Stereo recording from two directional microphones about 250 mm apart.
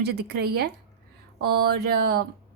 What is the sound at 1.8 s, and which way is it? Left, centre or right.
Speech, right.